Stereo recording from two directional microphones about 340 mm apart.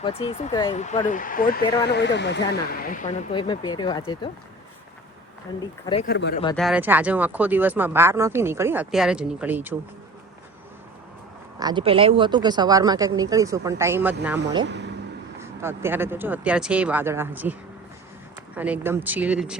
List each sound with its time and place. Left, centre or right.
0.0 s speech: centre
5.8 s speech: centre
6.1 s speech: left
6.6 s speech: centre
11.6 s speech: centre
14.6 s vehicle: right
15.4 s speech: centre